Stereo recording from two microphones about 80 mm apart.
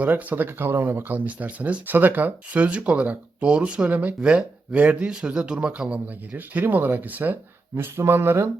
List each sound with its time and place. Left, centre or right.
0.0 s speech: right